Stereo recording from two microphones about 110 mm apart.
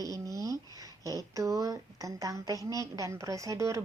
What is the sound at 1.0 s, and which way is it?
Speech, 30° right (ahead or behind).